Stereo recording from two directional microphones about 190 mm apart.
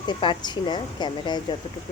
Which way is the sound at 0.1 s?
25° left (ahead or behind).